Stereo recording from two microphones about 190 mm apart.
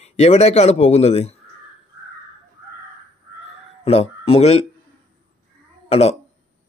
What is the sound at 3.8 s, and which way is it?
Speech, 30° left (ahead or behind).